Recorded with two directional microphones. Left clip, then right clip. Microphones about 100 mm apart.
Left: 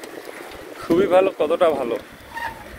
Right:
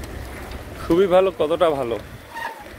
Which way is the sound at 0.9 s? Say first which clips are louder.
Even; 30° right (ahead or behind).